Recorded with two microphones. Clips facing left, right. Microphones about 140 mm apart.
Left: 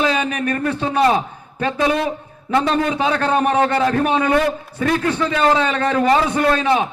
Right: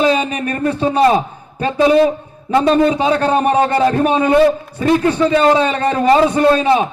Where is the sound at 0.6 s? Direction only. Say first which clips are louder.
Right 5 dB; 25° right (ahead or behind).